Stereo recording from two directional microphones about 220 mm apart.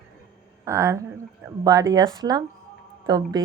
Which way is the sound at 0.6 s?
15° right (ahead or behind).